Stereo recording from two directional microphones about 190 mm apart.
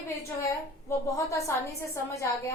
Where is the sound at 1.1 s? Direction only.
15° left (ahead or behind).